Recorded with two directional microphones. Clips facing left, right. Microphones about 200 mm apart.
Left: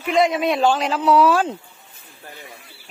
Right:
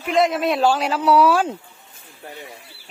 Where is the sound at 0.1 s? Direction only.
Centre (ahead or behind).